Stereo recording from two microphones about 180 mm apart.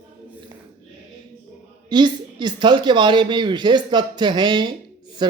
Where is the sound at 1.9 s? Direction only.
25° right (ahead or behind).